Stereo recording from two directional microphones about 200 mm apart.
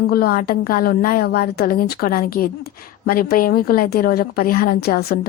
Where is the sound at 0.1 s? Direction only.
50° left (ahead or behind).